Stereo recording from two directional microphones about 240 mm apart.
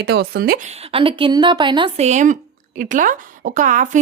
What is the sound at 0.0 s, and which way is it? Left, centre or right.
A woman's voice, right.